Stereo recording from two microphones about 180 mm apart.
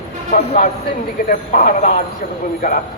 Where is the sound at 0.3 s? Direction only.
35° left (ahead or behind).